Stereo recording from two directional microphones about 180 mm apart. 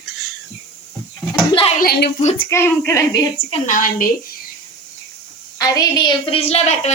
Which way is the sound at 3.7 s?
50° left (ahead or behind).